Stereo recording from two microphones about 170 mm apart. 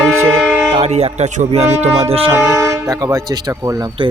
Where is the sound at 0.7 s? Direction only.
40° right (ahead or behind).